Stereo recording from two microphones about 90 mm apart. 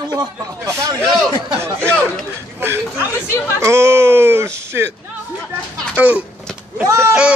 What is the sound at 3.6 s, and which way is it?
Speech, 30° right (ahead or behind).